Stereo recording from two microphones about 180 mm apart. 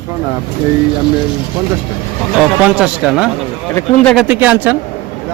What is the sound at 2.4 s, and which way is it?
A man's voice, 5° right (ahead or behind).